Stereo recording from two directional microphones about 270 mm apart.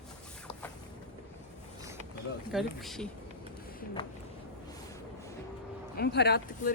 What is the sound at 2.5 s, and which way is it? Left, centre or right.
Speech, centre.